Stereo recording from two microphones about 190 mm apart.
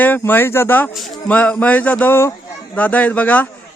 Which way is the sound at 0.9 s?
Centre (ahead or behind).